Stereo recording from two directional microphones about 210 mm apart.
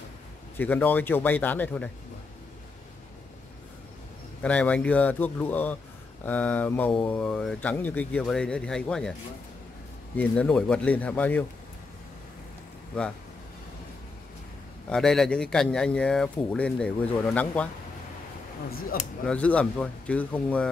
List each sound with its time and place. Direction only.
0.6 s speech: 10° left (ahead or behind)
4.4 s speech: 5° left (ahead or behind)
10.1 s speech: 5° left (ahead or behind)
14.9 s speech: centre (ahead or behind)
18.7 s speech: 45° left (ahead or behind)
19.2 s speech: 5° left (ahead or behind)